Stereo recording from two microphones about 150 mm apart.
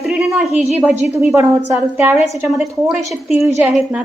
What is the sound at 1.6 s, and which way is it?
Speech, 15° right (ahead or behind).